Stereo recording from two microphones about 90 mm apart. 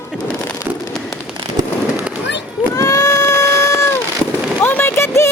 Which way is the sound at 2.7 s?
40° left (ahead or behind).